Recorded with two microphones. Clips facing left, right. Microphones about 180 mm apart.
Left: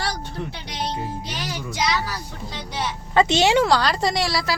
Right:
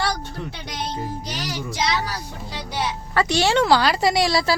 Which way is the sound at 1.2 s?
35° right (ahead or behind).